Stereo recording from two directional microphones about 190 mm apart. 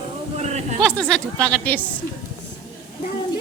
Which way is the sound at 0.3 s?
35° right (ahead or behind).